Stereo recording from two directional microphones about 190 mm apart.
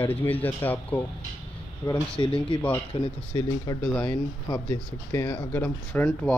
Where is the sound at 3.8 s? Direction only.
5° left (ahead or behind).